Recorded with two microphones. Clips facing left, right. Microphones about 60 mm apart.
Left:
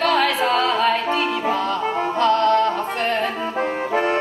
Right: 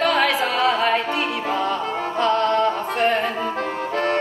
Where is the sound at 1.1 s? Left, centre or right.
Centre.